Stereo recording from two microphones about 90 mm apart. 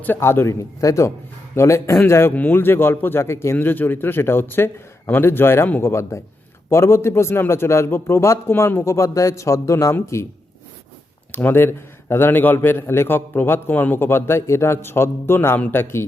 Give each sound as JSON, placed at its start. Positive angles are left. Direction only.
{"t": 0.0, "sound": "a man's voice", "side_deg": 25}
{"t": 11.3, "sound": "a man's voice", "side_deg": 20}